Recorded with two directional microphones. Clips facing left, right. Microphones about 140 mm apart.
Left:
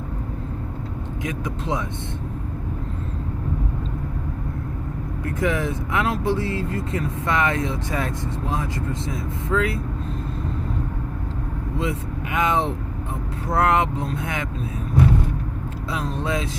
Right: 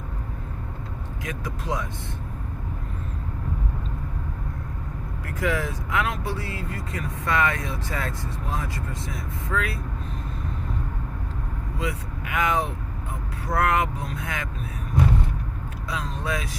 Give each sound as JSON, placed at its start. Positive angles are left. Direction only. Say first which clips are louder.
{"t": 1.2, "sound": "speech", "louder": "left 5 dB", "side_deg": 25}
{"t": 5.2, "sound": "speech", "louder": "left 3 dB", "side_deg": 20}
{"t": 11.8, "sound": "speech", "louder": "left 4 dB", "side_deg": 25}
{"t": 15.9, "sound": "speech", "louder": "left 4 dB", "side_deg": 25}